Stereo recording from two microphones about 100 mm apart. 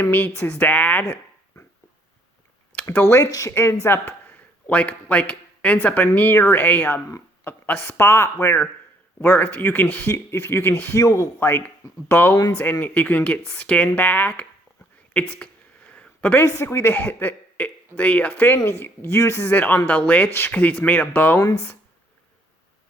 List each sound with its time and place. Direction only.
0.0 s speech: 20° left (ahead or behind)
2.9 s speech: 25° left (ahead or behind)
3.5 s speech: 25° left (ahead or behind)
11.0 s speech: 35° left (ahead or behind)
11.3 s speech: 20° left (ahead or behind)
15.9 s a man's voice: 15° left (ahead or behind)